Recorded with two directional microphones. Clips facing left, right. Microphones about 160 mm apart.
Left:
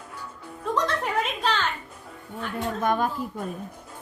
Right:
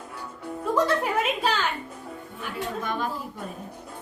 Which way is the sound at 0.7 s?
10° right (ahead or behind).